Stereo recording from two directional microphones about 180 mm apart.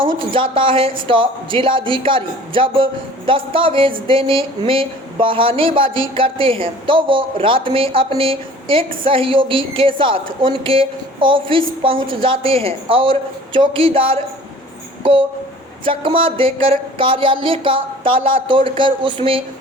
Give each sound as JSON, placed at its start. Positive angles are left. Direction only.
{"t": 0.2, "sound": "a woman's voice", "side_deg": -25}
{"t": 15.8, "sound": "a woman's voice", "side_deg": -30}